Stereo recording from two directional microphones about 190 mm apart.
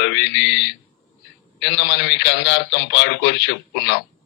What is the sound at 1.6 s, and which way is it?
Speech, 65° left (ahead or behind).